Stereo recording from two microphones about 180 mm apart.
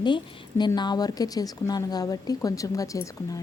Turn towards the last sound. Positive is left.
turn(degrees=20)  # may be behind; listen again after turning